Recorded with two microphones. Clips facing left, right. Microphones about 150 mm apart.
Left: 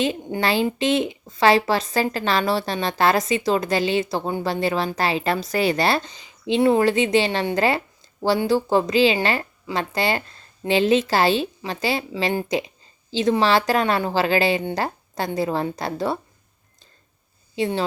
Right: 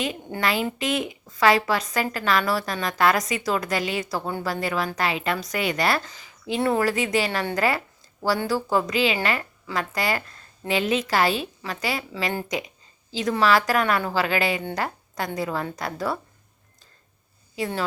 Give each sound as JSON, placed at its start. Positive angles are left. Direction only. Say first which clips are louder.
{"t": 0.3, "sound": "a woman's voice", "louder": "left 4 dB", "side_deg": 30}
{"t": 17.5, "sound": "speech", "louder": "left 5 dB", "side_deg": 25}